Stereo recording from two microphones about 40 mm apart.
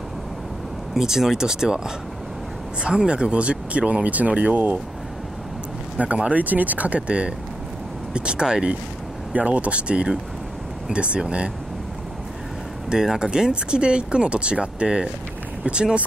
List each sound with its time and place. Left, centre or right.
0.9 s speech: centre
2.8 s speech: right
5.9 s speech: right
6.4 s speech: right
7.0 s speech: right
9.3 s speech: right
12.9 s speech: centre